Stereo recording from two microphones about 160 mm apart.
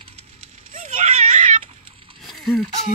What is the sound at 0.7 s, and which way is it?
Baby cry, 50° right (ahead or behind).